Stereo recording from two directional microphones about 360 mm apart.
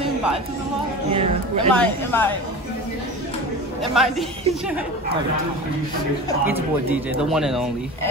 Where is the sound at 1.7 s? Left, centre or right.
Centre.